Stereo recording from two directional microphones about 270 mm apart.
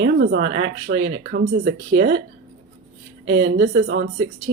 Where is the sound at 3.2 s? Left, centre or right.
Right.